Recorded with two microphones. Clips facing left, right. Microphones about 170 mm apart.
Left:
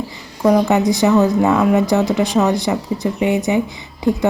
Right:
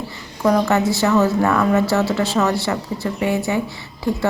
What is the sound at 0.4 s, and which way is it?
Speech, 15° left (ahead or behind).